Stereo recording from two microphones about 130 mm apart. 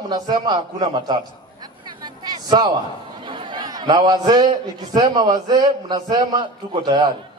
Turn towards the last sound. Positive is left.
turn(degrees=-35)  # may be behind; listen again after turning